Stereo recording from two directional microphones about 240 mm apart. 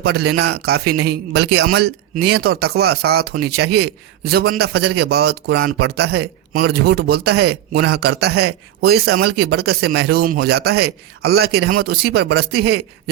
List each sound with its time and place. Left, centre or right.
0.0 s a man's voice: right
5.5 s speech: right
5.9 s a man's voice: right